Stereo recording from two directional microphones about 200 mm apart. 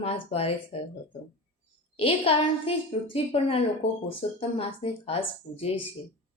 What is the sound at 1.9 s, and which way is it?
A woman's voice, 30° left (ahead or behind).